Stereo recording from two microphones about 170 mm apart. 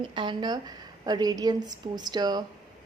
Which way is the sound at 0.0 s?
30° right (ahead or behind).